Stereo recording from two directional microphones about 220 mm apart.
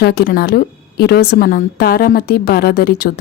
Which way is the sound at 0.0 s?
45° left (ahead or behind).